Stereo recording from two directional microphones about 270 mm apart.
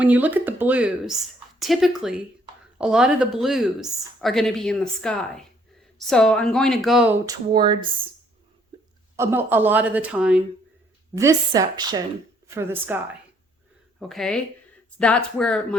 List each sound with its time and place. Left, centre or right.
0.0 s speech: centre
8.7 s a sound: centre
9.1 s a woman's voice: centre
14.0 s speech: centre